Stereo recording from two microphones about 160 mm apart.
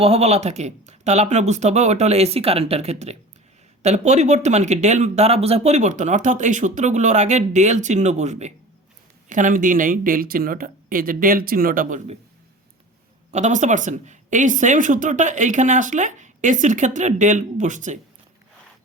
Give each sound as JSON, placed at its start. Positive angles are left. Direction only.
{"t": 0.0, "sound": "speech", "side_deg": -40}
{"t": 13.3, "sound": "speech", "side_deg": -45}